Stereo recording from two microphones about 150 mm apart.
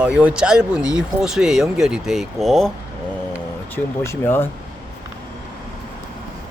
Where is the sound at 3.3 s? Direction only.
15° left (ahead or behind).